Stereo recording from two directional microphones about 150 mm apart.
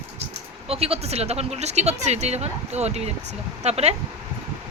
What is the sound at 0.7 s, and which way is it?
Speech, 40° right (ahead or behind).